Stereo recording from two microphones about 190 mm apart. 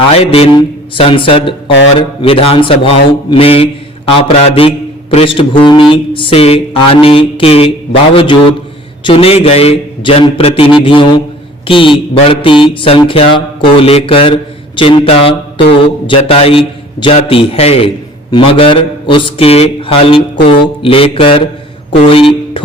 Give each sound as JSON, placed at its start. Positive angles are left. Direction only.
{"t": 0.1, "sound": "speech", "side_deg": 35}